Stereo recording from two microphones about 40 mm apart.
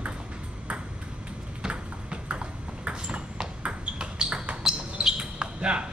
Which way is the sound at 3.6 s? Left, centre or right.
Right.